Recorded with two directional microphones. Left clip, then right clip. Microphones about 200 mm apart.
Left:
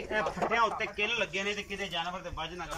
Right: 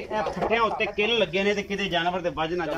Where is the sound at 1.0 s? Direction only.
20° right (ahead or behind); by 2.7 s 45° right (ahead or behind).